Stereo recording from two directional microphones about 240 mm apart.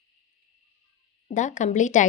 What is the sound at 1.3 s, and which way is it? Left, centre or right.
Speech, left.